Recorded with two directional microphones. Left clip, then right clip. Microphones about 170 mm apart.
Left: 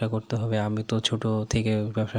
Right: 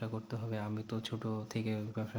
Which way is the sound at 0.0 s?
40° left (ahead or behind).